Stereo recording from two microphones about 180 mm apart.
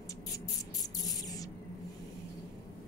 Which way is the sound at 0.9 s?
20° left (ahead or behind).